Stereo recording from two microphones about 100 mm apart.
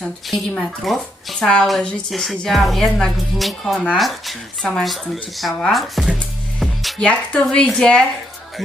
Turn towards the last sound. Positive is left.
turn(degrees=5)  # may be behind; listen again after turning